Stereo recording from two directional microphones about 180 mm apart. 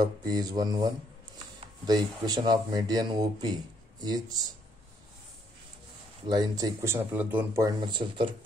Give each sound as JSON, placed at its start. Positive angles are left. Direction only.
{"t": 0.0, "sound": "speech", "side_deg": -20}
{"t": 6.2, "sound": "speech", "side_deg": -25}
{"t": 7.6, "sound": "speech", "side_deg": -25}